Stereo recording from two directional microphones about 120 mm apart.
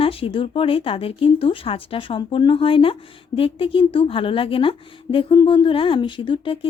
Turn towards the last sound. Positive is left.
turn(degrees=45)  # may be behind; listen again after turning